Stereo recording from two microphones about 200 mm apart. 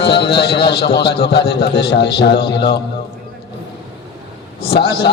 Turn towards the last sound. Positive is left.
turn(degrees=55)  # may be behind; listen again after turning